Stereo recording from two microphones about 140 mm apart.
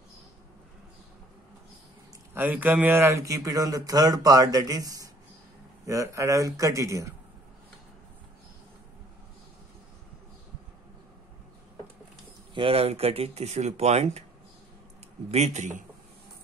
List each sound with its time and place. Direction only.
2.3 s speech: 15° right (ahead or behind)
12.5 s speech: 45° right (ahead or behind)
15.3 s a man's voice: 55° right (ahead or behind)